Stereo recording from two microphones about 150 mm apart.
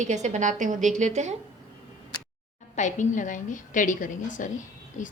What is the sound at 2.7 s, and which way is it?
A woman's voice, 55° left (ahead or behind).